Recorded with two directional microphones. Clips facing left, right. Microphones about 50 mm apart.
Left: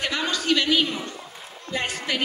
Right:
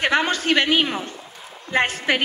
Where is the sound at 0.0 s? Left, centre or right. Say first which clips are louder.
Right 6 dB; right.